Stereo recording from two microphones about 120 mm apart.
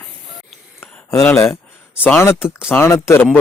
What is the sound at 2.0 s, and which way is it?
Speech, 20° left (ahead or behind).